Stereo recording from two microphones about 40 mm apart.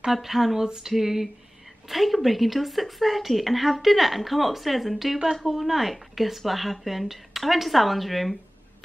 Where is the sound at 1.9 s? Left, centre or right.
Centre.